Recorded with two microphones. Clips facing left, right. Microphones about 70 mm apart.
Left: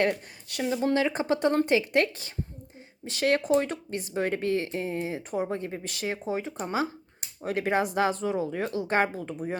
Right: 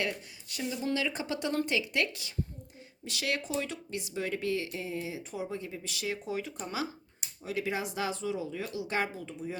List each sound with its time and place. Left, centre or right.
0.1 s speech: left
0.8 s speech: left
6.2 s speech: left